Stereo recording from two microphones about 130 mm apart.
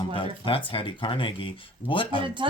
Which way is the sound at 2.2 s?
40° right (ahead or behind).